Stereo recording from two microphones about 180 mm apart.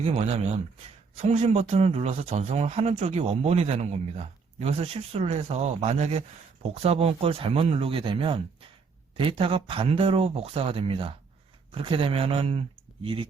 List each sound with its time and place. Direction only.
0.0 s speech: 35° right (ahead or behind)